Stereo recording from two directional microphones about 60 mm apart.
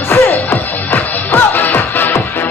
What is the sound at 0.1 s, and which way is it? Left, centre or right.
Music, left.